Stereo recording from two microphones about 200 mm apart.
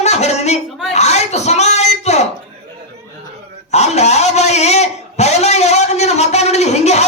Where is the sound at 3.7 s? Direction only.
35° left (ahead or behind).